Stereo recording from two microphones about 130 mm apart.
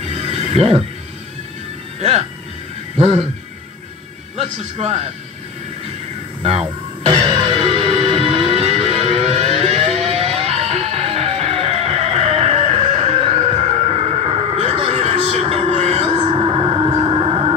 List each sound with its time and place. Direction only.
0.2 s neigh: 50° right (ahead or behind)
2.0 s speech: 55° right (ahead or behind)
4.4 s a man's voice: 55° right (ahead or behind)
7.1 s music: 40° right (ahead or behind)